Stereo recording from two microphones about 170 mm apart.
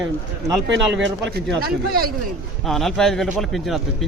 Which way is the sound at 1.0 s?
65° right (ahead or behind).